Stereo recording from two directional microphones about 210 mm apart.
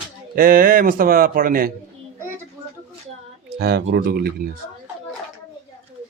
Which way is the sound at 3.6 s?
50° right (ahead or behind).